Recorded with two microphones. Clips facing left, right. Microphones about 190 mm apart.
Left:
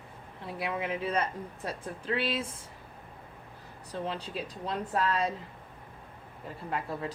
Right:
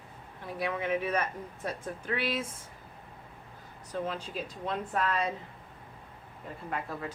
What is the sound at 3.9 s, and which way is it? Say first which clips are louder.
A woman's voice: right 1 dB; 35° left (ahead or behind).